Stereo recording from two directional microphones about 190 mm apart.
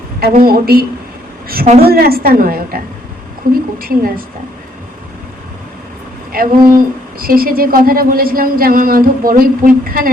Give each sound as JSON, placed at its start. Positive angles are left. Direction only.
{"t": 0.2, "sound": "speech", "side_deg": -50}
{"t": 6.3, "sound": "speech", "side_deg": -50}